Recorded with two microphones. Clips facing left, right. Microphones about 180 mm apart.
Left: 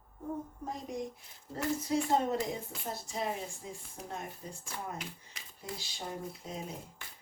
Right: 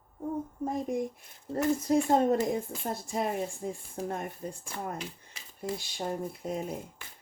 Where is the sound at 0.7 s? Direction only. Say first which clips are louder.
Right 7 dB; 50° right (ahead or behind).